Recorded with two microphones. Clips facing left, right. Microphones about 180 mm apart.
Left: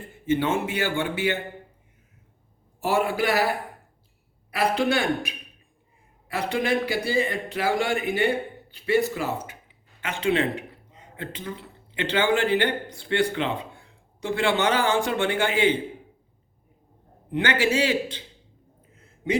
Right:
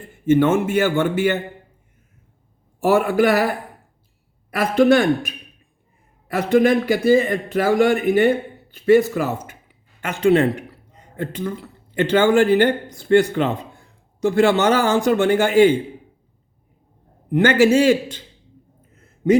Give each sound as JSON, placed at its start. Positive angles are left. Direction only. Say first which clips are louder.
{"t": 0.3, "sound": "a man's voice", "louder": "right 8 dB", "side_deg": -50}
{"t": 2.8, "sound": "a man's voice", "louder": "right 7 dB", "side_deg": -50}
{"t": 4.5, "sound": "a man's voice", "louder": "right 8 dB", "side_deg": -45}
{"t": 17.3, "sound": "a man's voice", "louder": "right 9 dB", "side_deg": -45}
{"t": 18.9, "sound": "a sound", "louder": "right 10 dB", "side_deg": -45}